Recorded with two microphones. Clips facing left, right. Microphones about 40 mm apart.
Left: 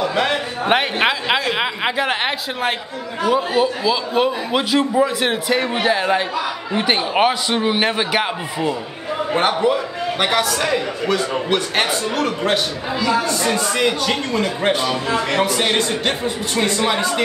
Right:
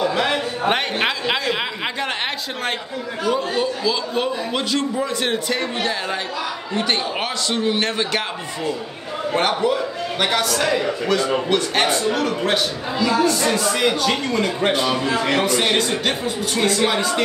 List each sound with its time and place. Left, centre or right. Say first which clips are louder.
0.0 s a man's voice: left 1 dB; centre